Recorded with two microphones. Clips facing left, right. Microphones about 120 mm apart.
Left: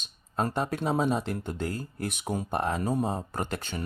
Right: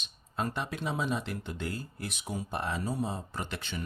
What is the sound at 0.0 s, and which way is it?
Speech, 40° left (ahead or behind).